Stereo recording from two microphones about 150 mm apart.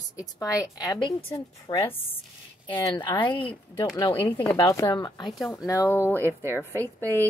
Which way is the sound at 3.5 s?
10° left (ahead or behind).